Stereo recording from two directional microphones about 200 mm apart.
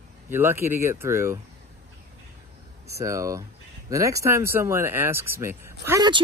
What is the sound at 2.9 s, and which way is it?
Speech, 15° right (ahead or behind).